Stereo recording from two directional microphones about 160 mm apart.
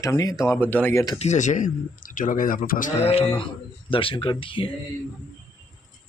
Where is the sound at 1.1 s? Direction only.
45° left (ahead or behind).